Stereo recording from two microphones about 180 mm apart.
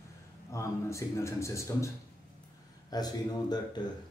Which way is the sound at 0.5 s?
15° left (ahead or behind).